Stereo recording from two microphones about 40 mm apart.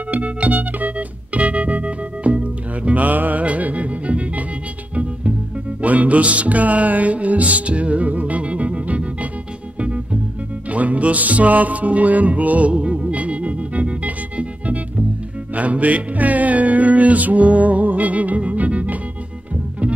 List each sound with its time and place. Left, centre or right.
0.1 s music: right
5.8 s music: right